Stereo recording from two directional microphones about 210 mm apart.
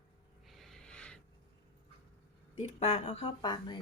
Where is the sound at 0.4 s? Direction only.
Centre (ahead or behind).